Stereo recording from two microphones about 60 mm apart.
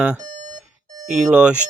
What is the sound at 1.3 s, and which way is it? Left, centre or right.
Speech, right.